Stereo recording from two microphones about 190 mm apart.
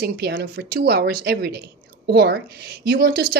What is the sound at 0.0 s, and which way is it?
A woman's voice, 60° right (ahead or behind).